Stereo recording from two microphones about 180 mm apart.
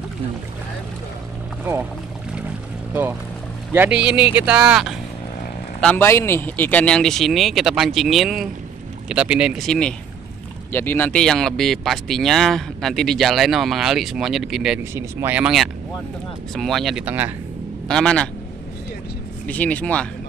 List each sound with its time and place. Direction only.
2.9 s speech: 10° right (ahead or behind)
5.8 s speech: 10° left (ahead or behind)
14.8 s speech: 15° right (ahead or behind)
17.8 s speech: 5° left (ahead or behind)
19.4 s speech: 10° left (ahead or behind)